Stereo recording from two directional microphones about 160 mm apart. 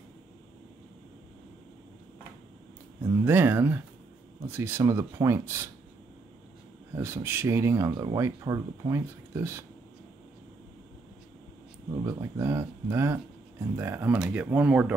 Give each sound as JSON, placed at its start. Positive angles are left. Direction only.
{"t": 3.0, "sound": "speech", "side_deg": -15}
{"t": 7.0, "sound": "speech", "side_deg": -15}
{"t": 12.1, "sound": "speech", "side_deg": -20}